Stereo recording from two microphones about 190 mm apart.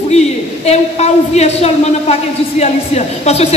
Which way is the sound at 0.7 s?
35° left (ahead or behind).